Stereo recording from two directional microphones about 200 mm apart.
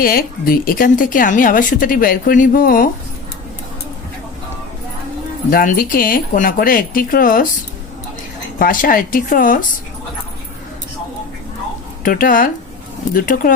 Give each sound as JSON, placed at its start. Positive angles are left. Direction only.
{"t": 0.0, "sound": "speech", "side_deg": 45}
{"t": 5.5, "sound": "speech", "side_deg": 45}
{"t": 8.5, "sound": "speech", "side_deg": 45}
{"t": 12.0, "sound": "speech", "side_deg": 45}